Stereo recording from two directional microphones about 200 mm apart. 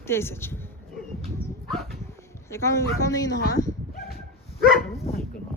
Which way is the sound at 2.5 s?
15° left (ahead or behind).